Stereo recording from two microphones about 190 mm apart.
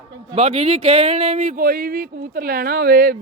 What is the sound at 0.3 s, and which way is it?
Speech, 30° right (ahead or behind).